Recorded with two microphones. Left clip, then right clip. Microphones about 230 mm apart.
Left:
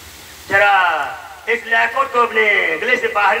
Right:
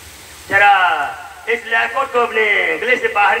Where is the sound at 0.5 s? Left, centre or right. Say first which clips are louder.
Right 2 dB; left.